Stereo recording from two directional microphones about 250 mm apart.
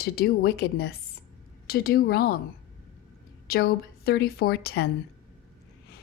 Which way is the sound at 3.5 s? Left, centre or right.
Left.